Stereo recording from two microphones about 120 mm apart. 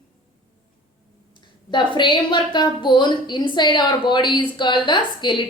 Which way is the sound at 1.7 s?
40° left (ahead or behind).